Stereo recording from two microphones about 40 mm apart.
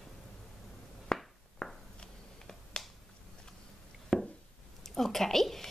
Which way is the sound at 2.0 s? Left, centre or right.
Left.